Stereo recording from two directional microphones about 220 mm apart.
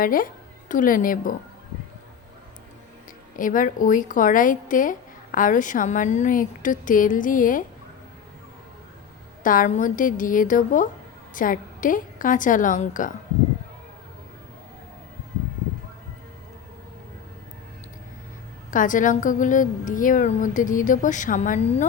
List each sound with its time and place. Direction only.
0.0 s a woman's voice: 40° left (ahead or behind)
3.3 s a woman's voice: 35° left (ahead or behind)
9.4 s a woman's voice: 35° left (ahead or behind)
18.7 s a woman's voice: 35° left (ahead or behind)